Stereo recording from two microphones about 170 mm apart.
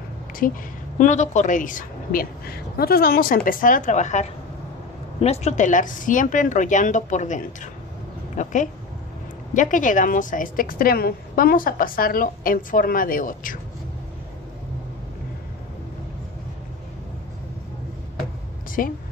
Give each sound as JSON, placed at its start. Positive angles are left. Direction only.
{"t": 0.4, "sound": "a woman's voice", "side_deg": 55}
{"t": 18.8, "sound": "a woman's voice", "side_deg": 55}